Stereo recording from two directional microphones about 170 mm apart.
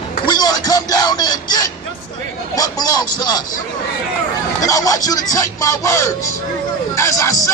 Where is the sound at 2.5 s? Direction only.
20° left (ahead or behind).